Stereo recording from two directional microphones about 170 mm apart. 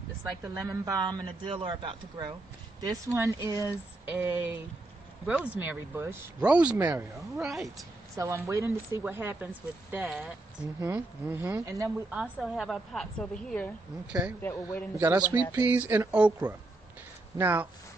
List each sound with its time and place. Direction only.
0.4 s a woman's voice: 20° right (ahead or behind); by 7.7 s centre (ahead or behind)
8.2 s a woman's voice: 15° right (ahead or behind); by 14.9 s 15° left (ahead or behind)
15.0 s speech: 10° right (ahead or behind)